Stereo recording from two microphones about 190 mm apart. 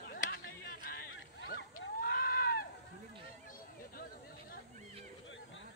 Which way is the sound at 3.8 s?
50° left (ahead or behind).